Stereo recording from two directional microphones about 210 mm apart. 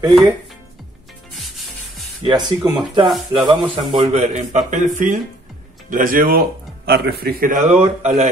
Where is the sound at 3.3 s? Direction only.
20° right (ahead or behind).